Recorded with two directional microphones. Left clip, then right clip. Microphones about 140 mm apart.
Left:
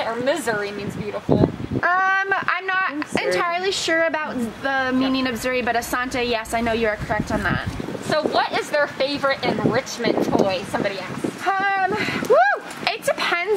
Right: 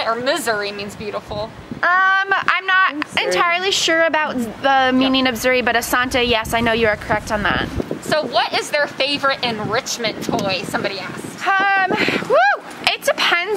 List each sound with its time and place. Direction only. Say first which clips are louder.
0.0 s a woman's voice: right 3 dB; 10° right (ahead or behind)
1.8 s a woman's voice: right 4 dB; 40° right (ahead or behind)
8.1 s a woman's voice: right 2 dB; 15° right (ahead or behind)
11.4 s a sound: right 5 dB; 40° right (ahead or behind)